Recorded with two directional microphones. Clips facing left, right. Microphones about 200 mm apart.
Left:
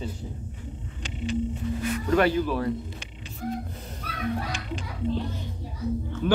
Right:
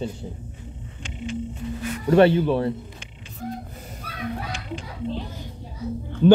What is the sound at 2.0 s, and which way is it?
Speech, 30° right (ahead or behind).